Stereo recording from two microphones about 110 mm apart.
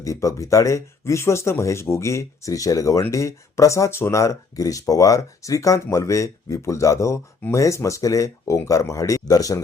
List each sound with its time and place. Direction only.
0.0 s speech: 30° left (ahead or behind)